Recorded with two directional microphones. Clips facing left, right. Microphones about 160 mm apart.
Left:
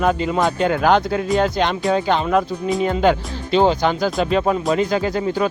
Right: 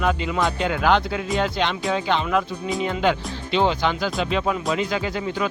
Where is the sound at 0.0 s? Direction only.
40° left (ahead or behind).